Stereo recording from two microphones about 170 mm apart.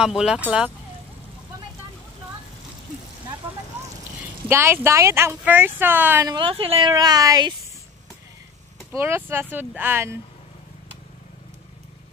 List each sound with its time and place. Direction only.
0.0 s speech: 5° right (ahead or behind)
4.5 s speech: 15° right (ahead or behind)
6.2 s speech: 30° right (ahead or behind)
6.9 s speech: 20° right (ahead or behind)
8.9 s speech: 15° right (ahead or behind)